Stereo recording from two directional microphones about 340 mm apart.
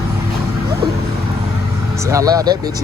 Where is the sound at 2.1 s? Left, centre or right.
Centre.